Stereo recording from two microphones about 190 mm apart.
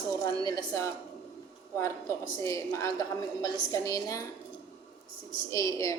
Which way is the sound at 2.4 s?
15° left (ahead or behind).